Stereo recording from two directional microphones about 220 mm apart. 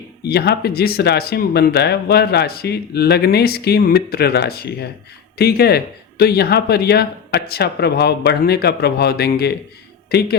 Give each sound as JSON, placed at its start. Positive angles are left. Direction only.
{"t": 0.2, "sound": "speech", "side_deg": 45}